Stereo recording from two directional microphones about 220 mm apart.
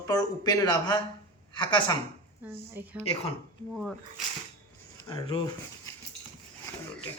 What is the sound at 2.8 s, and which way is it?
A woman's voice, 10° right (ahead or behind).